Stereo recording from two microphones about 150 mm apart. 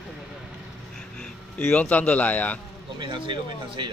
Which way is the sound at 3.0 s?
30° right (ahead or behind).